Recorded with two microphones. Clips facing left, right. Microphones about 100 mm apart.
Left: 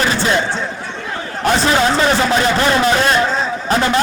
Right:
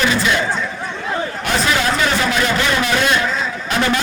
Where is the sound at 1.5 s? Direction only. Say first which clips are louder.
Left 3 dB; 35° left (ahead or behind).